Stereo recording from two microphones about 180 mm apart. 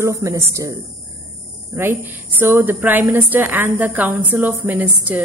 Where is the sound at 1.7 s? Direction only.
10° right (ahead or behind).